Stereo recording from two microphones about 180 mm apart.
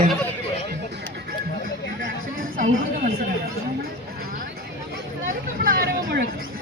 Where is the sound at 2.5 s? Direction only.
55° right (ahead or behind).